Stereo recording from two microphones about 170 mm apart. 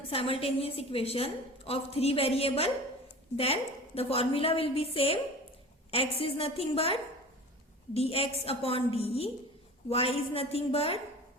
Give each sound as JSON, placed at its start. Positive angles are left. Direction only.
{"t": 0.1, "sound": "a woman's voice", "side_deg": 35}